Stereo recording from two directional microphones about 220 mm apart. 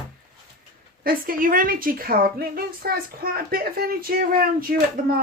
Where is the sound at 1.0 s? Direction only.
40° right (ahead or behind).